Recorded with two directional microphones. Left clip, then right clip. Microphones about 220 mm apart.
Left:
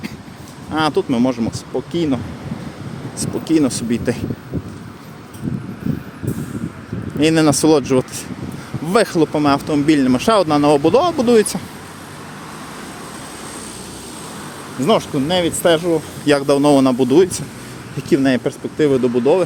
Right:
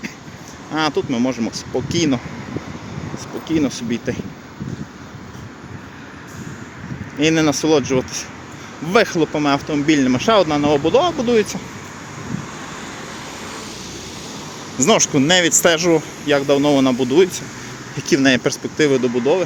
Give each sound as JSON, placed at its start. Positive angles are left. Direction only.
{"t": 0.7, "sound": "speech", "side_deg": 10}
{"t": 3.2, "sound": "speech", "side_deg": 25}
{"t": 7.2, "sound": "speech", "side_deg": 15}
{"t": 14.8, "sound": "speech", "side_deg": -5}
{"t": 16.2, "sound": "speech", "side_deg": 25}
{"t": 17.9, "sound": "speech", "side_deg": 10}